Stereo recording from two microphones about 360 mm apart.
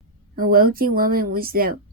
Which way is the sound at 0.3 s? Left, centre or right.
Right.